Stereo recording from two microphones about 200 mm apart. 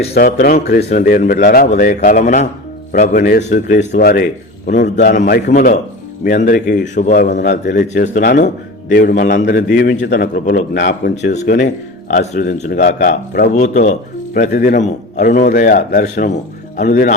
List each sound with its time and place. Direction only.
0.1 s a man's voice: 45° left (ahead or behind)
5.5 s a man's voice: 40° left (ahead or behind)
8.2 s speech: 60° left (ahead or behind)
8.4 s a man's voice: 45° left (ahead or behind)
11.2 s a man's voice: 50° left (ahead or behind)